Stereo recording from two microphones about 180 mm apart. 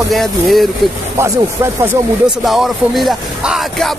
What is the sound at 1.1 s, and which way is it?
Speech, 15° right (ahead or behind).